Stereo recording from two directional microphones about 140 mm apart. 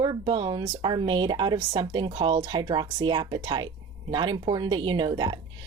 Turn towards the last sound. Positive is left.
turn(degrees=-30)  # may be behind; listen again after turning